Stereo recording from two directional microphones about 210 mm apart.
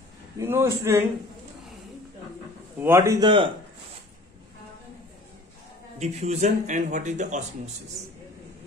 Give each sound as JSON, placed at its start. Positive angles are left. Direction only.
{"t": 0.4, "sound": "speech", "side_deg": -10}
{"t": 2.8, "sound": "speech", "side_deg": -10}
{"t": 5.9, "sound": "speech", "side_deg": -30}